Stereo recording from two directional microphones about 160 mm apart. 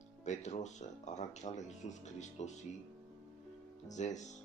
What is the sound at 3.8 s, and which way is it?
Speech, 50° left (ahead or behind).